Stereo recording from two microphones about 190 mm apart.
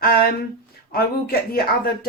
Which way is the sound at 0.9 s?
55° left (ahead or behind).